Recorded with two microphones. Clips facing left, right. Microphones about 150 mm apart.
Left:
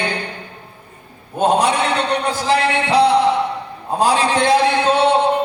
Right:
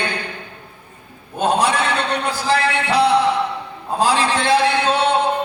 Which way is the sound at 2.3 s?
20° left (ahead or behind).